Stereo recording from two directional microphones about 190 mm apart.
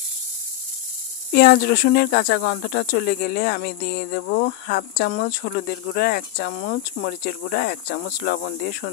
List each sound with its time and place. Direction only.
1.3 s speech: 55° left (ahead or behind)